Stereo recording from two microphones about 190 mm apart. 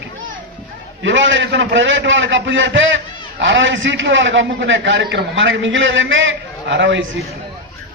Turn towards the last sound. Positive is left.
turn(degrees=-70)  # may be behind; listen again after turning